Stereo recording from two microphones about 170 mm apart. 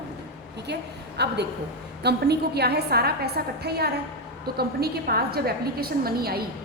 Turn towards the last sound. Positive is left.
turn(degrees=-65)  # may be behind; listen again after turning